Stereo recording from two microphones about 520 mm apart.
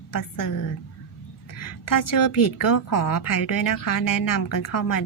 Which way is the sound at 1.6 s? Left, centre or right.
Left.